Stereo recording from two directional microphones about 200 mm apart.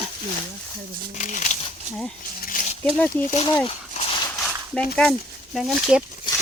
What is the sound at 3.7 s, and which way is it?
Dog, 30° left (ahead or behind).